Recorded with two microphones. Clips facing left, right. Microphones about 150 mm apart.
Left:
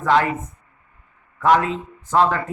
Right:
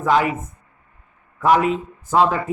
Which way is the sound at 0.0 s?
10° right (ahead or behind).